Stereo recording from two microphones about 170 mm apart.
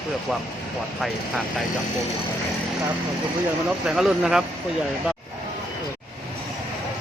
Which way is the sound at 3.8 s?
5° right (ahead or behind).